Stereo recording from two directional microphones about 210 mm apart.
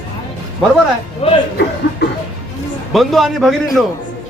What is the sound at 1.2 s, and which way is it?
Speech, 25° left (ahead or behind).